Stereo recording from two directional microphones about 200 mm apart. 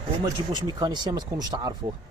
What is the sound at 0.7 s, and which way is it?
Speech, 20° right (ahead or behind).